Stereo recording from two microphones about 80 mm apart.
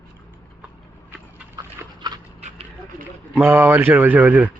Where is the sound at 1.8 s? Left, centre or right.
Right.